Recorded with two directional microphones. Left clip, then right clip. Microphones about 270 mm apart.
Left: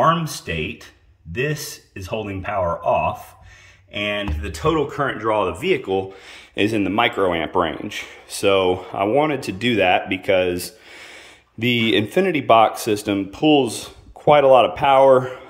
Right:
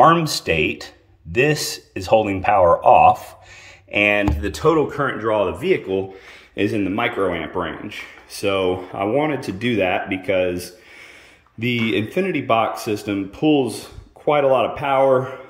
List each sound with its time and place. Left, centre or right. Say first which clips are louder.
0.2 s speech: right 7 dB; centre
4.9 s speech: right 1 dB; centre
11.7 s speech: left 3 dB; centre